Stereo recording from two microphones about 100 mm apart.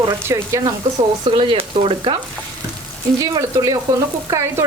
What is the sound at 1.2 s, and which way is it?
Speech, 55° right (ahead or behind).